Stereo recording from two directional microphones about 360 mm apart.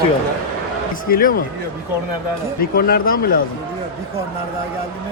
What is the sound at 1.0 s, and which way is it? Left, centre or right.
Speech, left.